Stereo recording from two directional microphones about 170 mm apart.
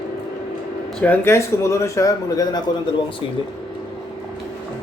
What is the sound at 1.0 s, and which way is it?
Speech, 15° left (ahead or behind).